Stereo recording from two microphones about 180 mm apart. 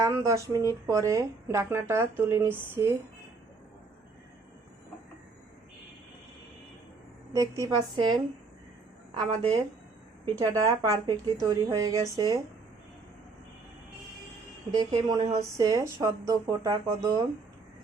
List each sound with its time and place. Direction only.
0.0 s speech: 15° right (ahead or behind)
7.3 s speech: 20° right (ahead or behind)
10.3 s speech: 20° right (ahead or behind)
14.7 s speech: 20° right (ahead or behind)